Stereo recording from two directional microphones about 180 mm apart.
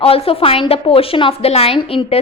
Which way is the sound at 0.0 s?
30° left (ahead or behind).